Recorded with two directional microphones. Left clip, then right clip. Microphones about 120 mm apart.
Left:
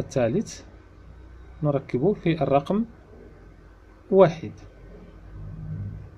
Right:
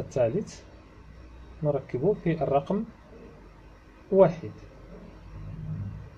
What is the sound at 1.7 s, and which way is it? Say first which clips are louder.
Speech: left 2 dB; 50° left (ahead or behind).